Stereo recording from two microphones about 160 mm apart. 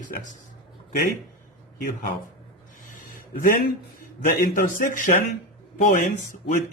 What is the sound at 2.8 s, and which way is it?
A man's voice, 55° left (ahead or behind).